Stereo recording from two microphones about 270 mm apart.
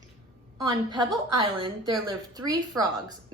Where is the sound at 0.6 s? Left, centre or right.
Centre.